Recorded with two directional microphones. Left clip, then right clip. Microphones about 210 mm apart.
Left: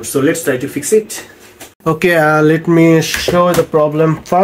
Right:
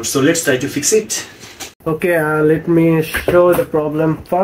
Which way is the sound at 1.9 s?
75° left (ahead or behind).